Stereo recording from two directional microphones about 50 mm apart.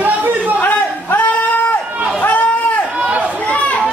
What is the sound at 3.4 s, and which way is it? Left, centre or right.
Chatter, left.